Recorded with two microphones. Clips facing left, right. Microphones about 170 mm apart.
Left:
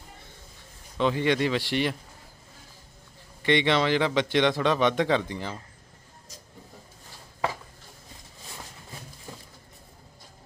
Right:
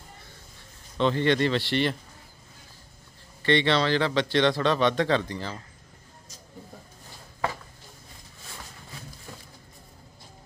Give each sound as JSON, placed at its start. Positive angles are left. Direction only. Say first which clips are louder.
{"t": 0.9, "sound": "speech", "louder": "right 1 dB", "side_deg": 10}
{"t": 3.4, "sound": "speech", "louder": "even", "side_deg": 15}